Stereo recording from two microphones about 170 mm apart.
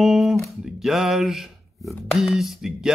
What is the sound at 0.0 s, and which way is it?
Guitar, centre (ahead or behind).